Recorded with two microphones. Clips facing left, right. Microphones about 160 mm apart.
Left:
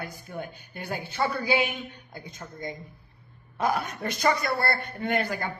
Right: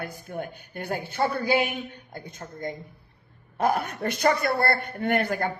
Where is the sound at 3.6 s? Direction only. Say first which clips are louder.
Right 3 dB; 55° right (ahead or behind).